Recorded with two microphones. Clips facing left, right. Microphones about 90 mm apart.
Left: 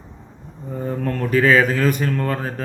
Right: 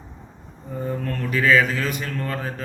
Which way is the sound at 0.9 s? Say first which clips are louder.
Left 5 dB; 35° left (ahead or behind).